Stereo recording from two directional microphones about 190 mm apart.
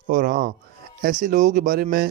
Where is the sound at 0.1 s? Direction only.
45° right (ahead or behind).